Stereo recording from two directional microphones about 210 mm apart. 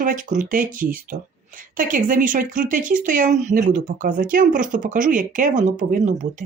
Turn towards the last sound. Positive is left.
turn(degrees=-35)  # may be behind; listen again after turning